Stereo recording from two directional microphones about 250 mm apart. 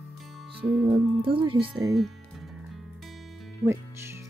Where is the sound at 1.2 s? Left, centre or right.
Right.